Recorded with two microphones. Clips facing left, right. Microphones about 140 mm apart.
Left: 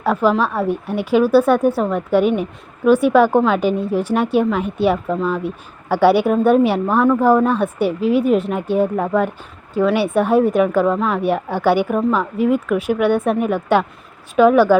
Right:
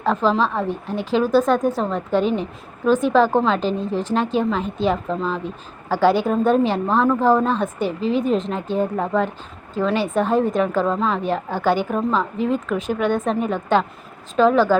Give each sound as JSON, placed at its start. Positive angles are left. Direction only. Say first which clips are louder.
{"t": 0.0, "sound": "a woman's voice", "louder": "left 2 dB", "side_deg": 10}